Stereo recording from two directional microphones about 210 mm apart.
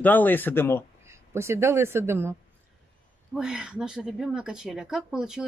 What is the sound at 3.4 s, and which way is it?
Speech, 5° right (ahead or behind).